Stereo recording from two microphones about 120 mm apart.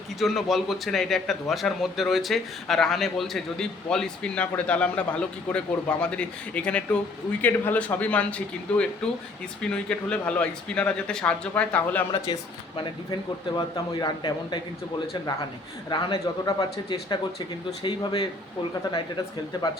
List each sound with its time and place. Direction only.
0.2 s speech: centre (ahead or behind)
12.1 s a man's voice: 35° left (ahead or behind)